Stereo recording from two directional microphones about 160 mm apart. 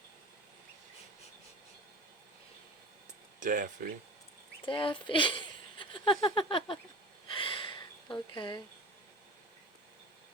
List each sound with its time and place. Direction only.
3.4 s speech: 55° right (ahead or behind)
4.6 s speech: 30° left (ahead or behind)
7.3 s gasp: 35° left (ahead or behind)